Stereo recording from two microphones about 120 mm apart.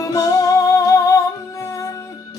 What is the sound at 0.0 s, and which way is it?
Music, 30° left (ahead or behind).